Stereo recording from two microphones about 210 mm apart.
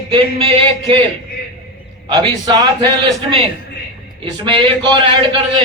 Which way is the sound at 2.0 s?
20° right (ahead or behind).